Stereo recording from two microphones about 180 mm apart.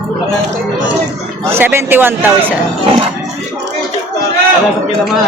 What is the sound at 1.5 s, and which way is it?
Speech, 15° right (ahead or behind).